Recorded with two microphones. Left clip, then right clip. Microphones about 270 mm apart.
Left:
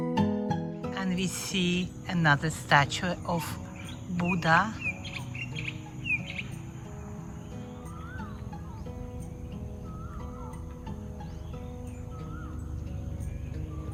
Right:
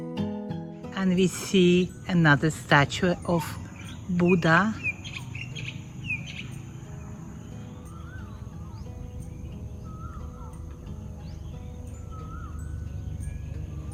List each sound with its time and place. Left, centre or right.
0.0 s speech: centre
5.0 s bird: left